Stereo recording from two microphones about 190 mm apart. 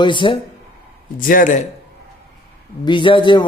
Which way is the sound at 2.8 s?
25° left (ahead or behind).